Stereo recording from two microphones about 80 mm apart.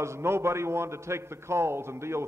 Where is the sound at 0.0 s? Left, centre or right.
Right.